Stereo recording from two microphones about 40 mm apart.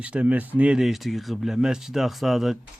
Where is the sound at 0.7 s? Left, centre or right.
Centre.